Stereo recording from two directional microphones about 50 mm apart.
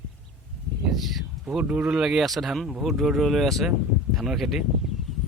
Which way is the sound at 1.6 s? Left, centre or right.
Right.